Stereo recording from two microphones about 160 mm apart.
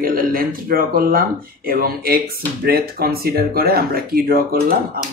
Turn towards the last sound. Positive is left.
turn(degrees=-70)  # may be behind; listen again after turning